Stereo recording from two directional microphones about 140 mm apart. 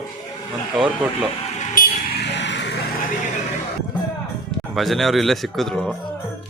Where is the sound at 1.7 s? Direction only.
90° left.